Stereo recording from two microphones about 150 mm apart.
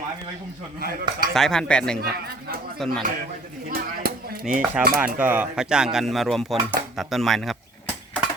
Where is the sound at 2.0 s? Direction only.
90° right.